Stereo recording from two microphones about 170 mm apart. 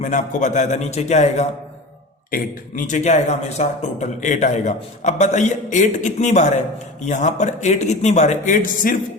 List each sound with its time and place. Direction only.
0.0 s speech: 45° left (ahead or behind)